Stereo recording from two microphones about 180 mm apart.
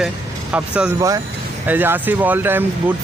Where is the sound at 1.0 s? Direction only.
20° right (ahead or behind).